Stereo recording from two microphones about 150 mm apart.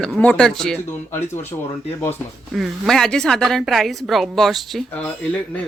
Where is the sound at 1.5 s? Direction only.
25° left (ahead or behind).